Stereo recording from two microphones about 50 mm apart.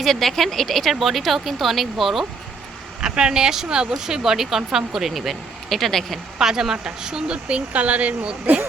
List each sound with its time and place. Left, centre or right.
0.0 s speech: centre
3.0 s speech: centre
6.4 s speech: centre